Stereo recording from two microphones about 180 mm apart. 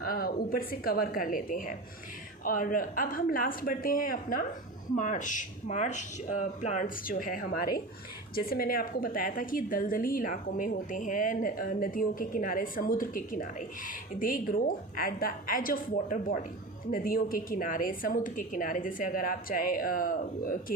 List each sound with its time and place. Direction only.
0.0 s a woman's voice: 55° left (ahead or behind)